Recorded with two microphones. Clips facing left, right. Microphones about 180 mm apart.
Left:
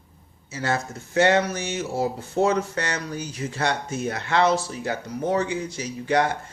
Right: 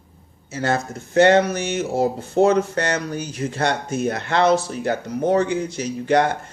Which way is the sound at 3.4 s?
50° right (ahead or behind).